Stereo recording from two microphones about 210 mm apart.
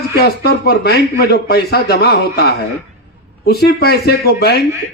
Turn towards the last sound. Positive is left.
turn(degrees=50)  # may be behind; listen again after turning